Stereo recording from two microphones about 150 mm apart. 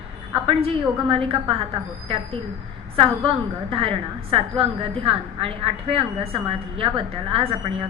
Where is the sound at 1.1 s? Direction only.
35° right (ahead or behind).